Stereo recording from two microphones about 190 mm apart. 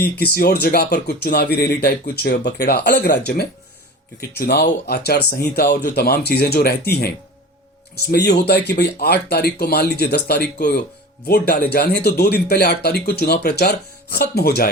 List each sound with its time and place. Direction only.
0.0 s speech: 55° left (ahead or behind)